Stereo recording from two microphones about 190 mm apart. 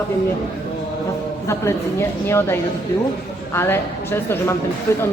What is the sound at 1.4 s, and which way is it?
A woman's voice, 15° left (ahead or behind).